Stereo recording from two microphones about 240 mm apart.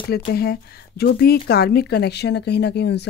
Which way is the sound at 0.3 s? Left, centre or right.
Left.